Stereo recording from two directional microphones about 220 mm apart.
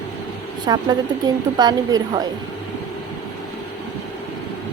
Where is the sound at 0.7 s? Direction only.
20° right (ahead or behind).